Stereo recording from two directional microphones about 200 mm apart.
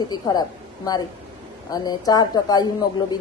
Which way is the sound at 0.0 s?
20° left (ahead or behind).